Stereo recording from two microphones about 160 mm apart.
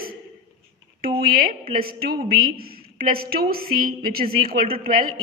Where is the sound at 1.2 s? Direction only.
65° right (ahead or behind).